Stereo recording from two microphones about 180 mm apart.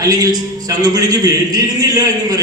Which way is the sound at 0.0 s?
20° right (ahead or behind).